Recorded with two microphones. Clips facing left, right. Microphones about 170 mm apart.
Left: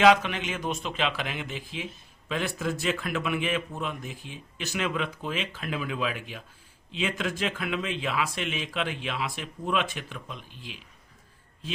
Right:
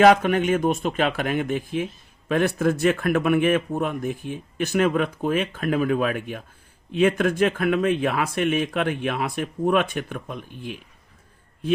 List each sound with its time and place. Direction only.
0.0 s speech: 50° right (ahead or behind)